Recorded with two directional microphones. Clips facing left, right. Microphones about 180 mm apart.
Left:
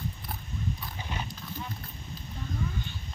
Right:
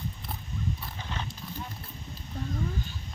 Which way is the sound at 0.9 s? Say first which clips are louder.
Even; 10° left (ahead or behind).